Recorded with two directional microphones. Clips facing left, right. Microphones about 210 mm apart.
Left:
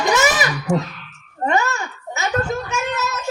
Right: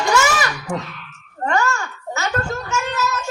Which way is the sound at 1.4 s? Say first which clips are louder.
Left 1 dB; 20° left (ahead or behind).